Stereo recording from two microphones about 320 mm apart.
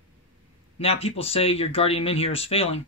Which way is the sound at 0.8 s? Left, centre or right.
Centre.